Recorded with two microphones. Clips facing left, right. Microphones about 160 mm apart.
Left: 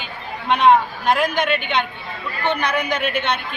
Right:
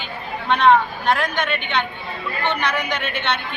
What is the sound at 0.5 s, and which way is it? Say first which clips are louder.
Speech: left 1 dB; 10° left (ahead or behind).